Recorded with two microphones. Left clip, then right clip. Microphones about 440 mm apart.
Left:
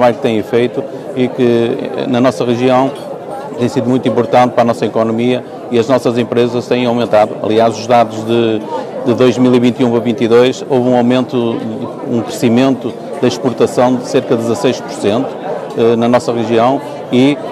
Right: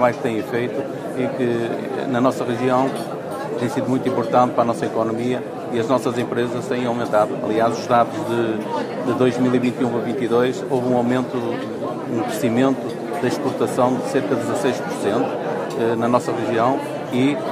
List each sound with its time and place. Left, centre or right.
0.0 s speech: left
12.4 s speech: left
13.7 s speech: left